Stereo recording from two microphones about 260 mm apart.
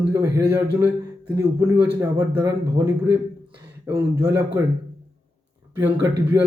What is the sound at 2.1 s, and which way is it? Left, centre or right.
Speech, centre.